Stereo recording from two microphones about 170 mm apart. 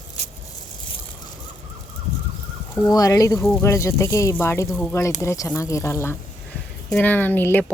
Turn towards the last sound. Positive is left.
turn(degrees=10)  # may be behind; listen again after turning